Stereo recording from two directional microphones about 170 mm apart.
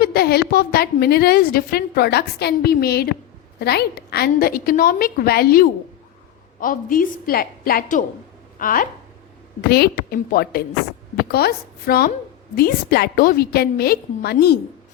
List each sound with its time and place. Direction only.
0.0 s a woman's voice: 65° left (ahead or behind)
9.6 s a woman's voice: 65° left (ahead or behind)